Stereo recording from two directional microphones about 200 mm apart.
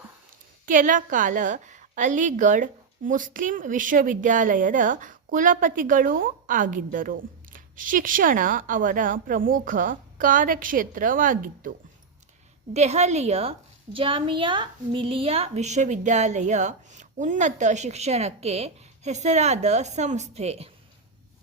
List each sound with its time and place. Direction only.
0.6 s a woman's voice: 40° right (ahead or behind)
12.7 s a woman's voice: 35° right (ahead or behind)